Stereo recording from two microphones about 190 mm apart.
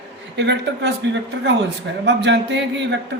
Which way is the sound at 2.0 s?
65° right (ahead or behind).